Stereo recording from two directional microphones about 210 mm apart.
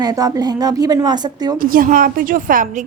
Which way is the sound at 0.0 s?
15° right (ahead or behind).